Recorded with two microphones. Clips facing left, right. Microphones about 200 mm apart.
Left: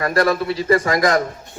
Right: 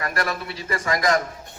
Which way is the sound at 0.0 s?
35° left (ahead or behind).